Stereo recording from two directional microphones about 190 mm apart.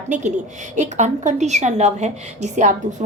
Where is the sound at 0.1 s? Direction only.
40° right (ahead or behind).